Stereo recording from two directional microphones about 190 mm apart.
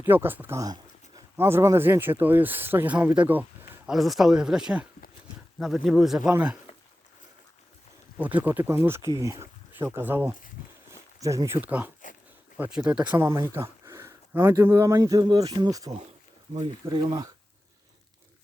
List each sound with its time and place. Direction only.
0.0 s speech: 10° right (ahead or behind)
8.2 s speech: 10° right (ahead or behind)